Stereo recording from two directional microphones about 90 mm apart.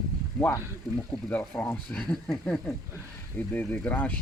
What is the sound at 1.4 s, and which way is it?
Speech, 25° left (ahead or behind).